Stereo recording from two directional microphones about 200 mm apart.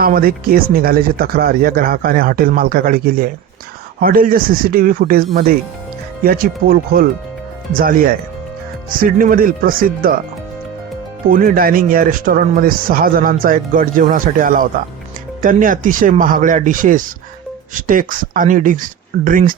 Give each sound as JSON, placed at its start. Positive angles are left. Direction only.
{"t": 0.0, "sound": "speech", "side_deg": -45}
{"t": 11.3, "sound": "speech", "side_deg": -45}